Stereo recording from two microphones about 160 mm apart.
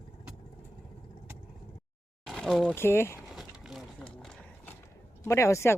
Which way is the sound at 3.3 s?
Centre (ahead or behind).